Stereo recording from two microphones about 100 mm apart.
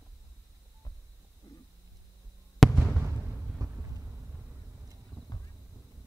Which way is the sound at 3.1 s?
35° right (ahead or behind).